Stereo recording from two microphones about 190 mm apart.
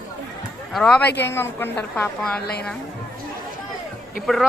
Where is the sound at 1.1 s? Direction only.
65° left (ahead or behind).